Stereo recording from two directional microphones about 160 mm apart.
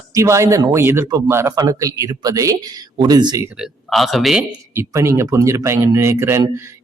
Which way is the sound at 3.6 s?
Centre (ahead or behind).